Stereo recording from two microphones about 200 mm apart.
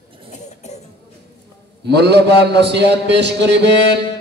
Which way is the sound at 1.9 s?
55° right (ahead or behind).